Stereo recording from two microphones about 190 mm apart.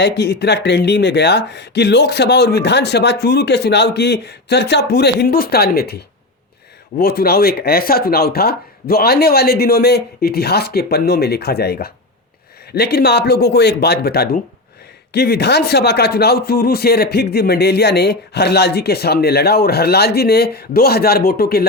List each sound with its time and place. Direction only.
0.0 s speech: 60° left (ahead or behind)
7.0 s speech: 55° left (ahead or behind)